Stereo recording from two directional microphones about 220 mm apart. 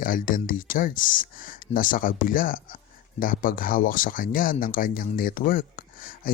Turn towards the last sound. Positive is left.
turn(degrees=40)  # may be behind; listen again after turning